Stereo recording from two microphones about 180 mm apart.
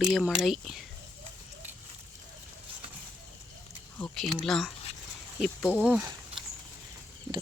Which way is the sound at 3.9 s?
5° left (ahead or behind).